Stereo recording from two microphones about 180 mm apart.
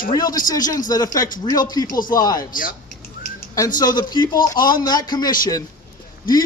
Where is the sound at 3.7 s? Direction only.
20° left (ahead or behind).